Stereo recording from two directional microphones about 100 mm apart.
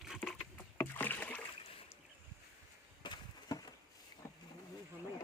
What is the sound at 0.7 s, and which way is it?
Rowboat, 20° left (ahead or behind).